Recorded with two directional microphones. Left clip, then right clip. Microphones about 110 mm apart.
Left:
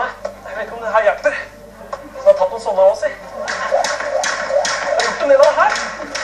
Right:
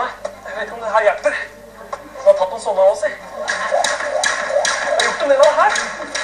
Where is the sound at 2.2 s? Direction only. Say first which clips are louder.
Left 1 dB; 10° right (ahead or behind).